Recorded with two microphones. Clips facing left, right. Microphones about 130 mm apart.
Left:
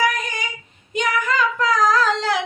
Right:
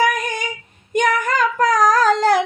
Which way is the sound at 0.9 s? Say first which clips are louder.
Right 3 dB; 55° right (ahead or behind).